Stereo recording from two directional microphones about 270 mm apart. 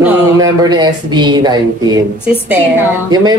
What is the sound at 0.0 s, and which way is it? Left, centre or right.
Speech, centre.